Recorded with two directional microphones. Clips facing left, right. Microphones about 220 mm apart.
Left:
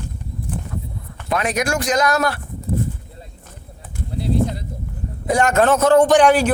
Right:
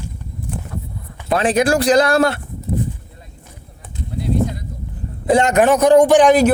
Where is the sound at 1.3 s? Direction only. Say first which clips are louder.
Right 5 dB; 30° right (ahead or behind).